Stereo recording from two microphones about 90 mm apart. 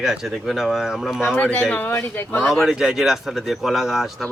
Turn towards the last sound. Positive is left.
turn(degrees=0)  # may be behind; listen again after turning